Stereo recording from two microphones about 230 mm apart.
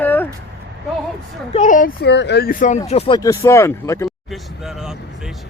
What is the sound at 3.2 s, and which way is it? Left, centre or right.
Speech, centre.